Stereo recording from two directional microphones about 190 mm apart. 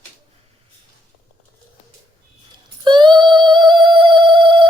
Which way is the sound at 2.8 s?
25° right (ahead or behind).